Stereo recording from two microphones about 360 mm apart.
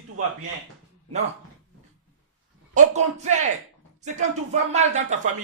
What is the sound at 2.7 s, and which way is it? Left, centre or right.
Speech, centre.